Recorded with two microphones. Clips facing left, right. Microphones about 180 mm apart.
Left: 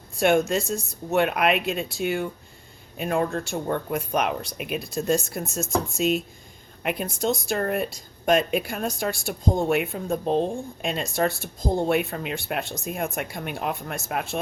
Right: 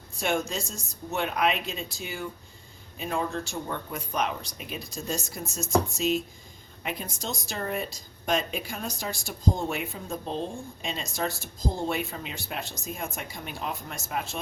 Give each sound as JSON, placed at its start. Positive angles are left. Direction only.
{"t": 0.2, "sound": "a woman's voice", "side_deg": 60}